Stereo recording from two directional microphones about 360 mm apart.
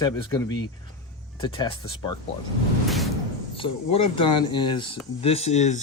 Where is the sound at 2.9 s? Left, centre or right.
Centre.